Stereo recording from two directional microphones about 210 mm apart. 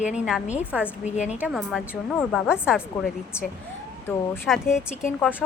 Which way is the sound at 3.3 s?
10° left (ahead or behind).